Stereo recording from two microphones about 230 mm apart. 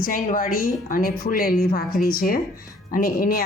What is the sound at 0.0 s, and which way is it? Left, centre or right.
A woman's voice, left.